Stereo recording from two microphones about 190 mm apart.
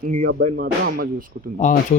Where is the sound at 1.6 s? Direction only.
40° left (ahead or behind).